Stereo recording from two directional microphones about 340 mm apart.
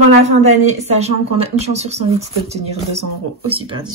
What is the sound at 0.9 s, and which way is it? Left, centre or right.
Speech, centre.